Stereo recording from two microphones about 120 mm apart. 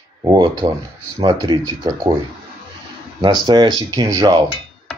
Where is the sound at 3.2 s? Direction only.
35° right (ahead or behind).